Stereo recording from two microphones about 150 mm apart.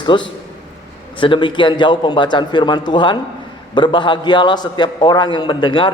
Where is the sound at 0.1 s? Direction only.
35° left (ahead or behind).